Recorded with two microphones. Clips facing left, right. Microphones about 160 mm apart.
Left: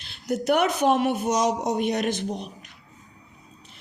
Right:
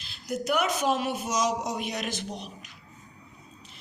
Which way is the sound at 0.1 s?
65° left (ahead or behind).